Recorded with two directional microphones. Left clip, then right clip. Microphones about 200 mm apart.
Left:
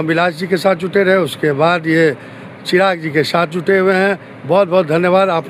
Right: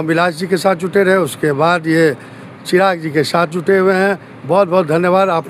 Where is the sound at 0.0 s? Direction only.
5° right (ahead or behind).